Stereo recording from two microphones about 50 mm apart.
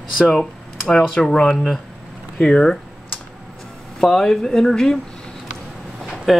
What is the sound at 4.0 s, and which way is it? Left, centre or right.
Speech, centre.